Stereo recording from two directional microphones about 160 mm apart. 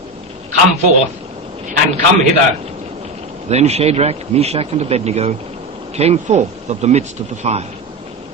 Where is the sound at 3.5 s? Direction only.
40° right (ahead or behind).